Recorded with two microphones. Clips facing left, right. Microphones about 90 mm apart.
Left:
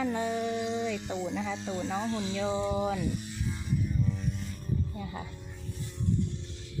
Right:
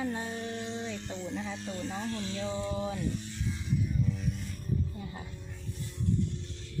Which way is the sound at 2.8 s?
75° left (ahead or behind).